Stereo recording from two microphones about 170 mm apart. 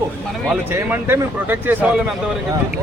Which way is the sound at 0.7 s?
15° right (ahead or behind).